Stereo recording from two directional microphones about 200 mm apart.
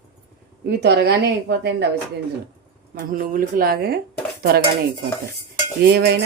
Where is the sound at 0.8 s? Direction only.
55° right (ahead or behind).